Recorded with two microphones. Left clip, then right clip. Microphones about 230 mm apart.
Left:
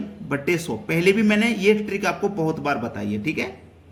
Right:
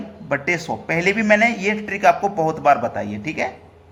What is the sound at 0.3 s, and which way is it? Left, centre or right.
A man's voice, centre.